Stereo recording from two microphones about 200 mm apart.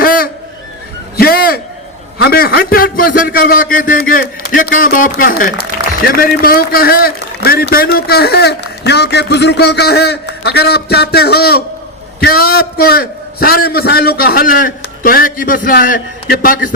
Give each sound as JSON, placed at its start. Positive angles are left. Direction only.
{"t": 0.0, "sound": "honk", "side_deg": 45}
{"t": 1.1, "sound": "a sound", "side_deg": 50}
{"t": 2.1, "sound": "a man's voice", "side_deg": 50}